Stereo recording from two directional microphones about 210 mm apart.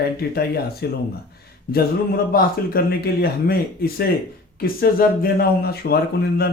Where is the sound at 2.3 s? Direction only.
45° left (ahead or behind).